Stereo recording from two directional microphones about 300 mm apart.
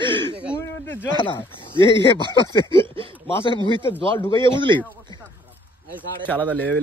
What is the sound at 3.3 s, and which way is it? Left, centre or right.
Speech, centre.